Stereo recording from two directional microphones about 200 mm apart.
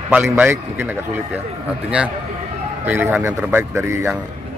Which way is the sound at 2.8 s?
10° right (ahead or behind).